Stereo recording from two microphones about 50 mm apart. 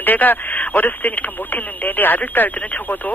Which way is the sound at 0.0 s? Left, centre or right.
Left.